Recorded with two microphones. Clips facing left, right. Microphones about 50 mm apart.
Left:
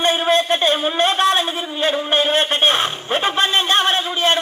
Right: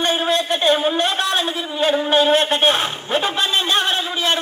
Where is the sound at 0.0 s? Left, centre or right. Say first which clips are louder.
Left 2 dB; left.